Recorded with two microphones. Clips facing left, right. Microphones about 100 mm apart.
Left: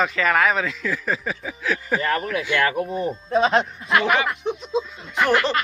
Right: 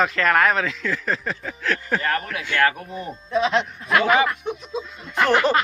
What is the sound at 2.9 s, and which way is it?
Speech, 35° left (ahead or behind).